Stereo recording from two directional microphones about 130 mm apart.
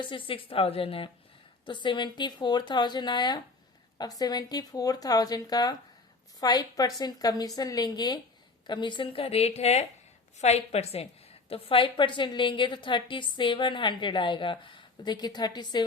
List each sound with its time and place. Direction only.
0.0 s a woman's voice: 40° left (ahead or behind)